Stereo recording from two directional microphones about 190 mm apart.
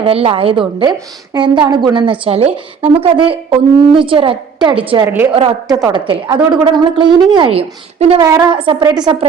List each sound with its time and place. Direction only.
0.0 s a woman's voice: 30° right (ahead or behind)
5.0 s a woman's voice: 10° right (ahead or behind)
5.3 s a woman's voice: 30° right (ahead or behind)
5.7 s a woman's voice: 15° right (ahead or behind)